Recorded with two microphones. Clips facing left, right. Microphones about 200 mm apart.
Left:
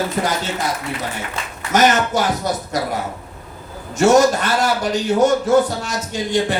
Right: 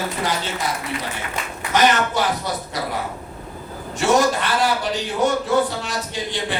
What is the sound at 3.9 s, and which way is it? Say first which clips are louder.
A man's voice: left 5 dB; 45° left (ahead or behind).